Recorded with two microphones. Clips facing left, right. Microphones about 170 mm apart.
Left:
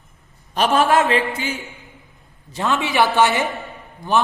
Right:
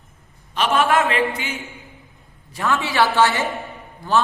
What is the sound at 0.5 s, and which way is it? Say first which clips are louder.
Speech: left 2 dB; 40° left (ahead or behind).